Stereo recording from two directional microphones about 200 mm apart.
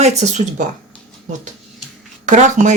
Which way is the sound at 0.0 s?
35° right (ahead or behind).